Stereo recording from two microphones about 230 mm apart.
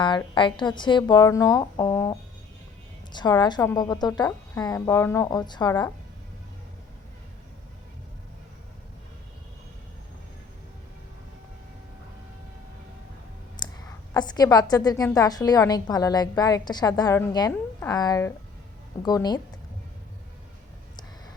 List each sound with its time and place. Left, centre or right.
0.3 s a woman's voice: left
13.6 s clicking: centre
14.1 s a woman's voice: centre